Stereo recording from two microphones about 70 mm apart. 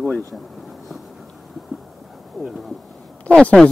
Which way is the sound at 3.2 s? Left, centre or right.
Centre.